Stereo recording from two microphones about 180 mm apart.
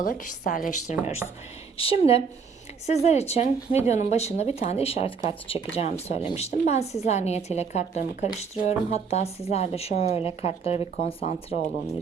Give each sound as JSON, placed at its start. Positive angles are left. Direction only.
{"t": 0.0, "sound": "a woman's voice", "side_deg": 50}
{"t": 1.8, "sound": "a woman's voice", "side_deg": 30}